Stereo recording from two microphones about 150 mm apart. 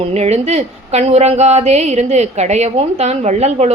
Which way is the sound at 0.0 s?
45° right (ahead or behind).